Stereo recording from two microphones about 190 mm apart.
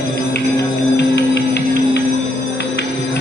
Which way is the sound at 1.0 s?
60° left (ahead or behind).